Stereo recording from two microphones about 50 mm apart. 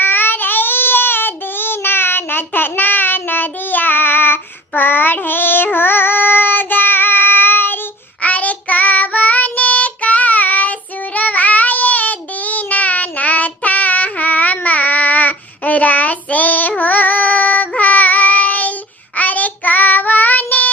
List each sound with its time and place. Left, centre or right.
0.0 s child singing: left
8.2 s child singing: left